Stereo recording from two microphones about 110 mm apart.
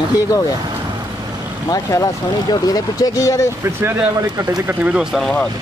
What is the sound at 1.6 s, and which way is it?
Speech, 35° left (ahead or behind).